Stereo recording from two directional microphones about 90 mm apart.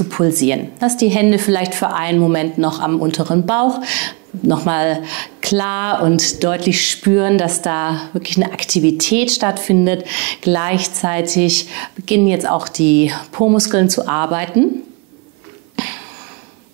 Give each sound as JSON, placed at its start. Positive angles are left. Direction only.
{"t": 0.1, "sound": "a woman's voice", "side_deg": -20}
{"t": 13.6, "sound": "a woman's voice", "side_deg": -15}
{"t": 15.7, "sound": "a sound", "side_deg": -15}